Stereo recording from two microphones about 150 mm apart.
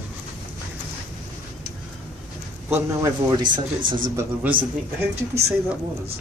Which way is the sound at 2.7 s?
25° right (ahead or behind).